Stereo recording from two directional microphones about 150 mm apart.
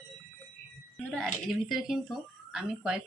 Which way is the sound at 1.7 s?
Centre (ahead or behind).